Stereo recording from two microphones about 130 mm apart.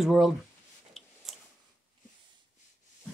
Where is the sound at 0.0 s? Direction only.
Centre (ahead or behind).